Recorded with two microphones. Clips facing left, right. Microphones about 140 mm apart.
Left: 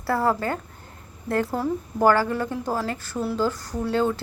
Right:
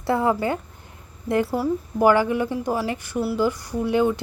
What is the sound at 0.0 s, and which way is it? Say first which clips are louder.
A woman's voice: right 2 dB; 20° right (ahead or behind).